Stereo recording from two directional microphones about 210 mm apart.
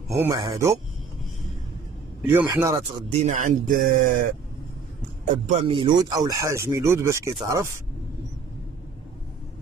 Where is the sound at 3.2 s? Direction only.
40° right (ahead or behind).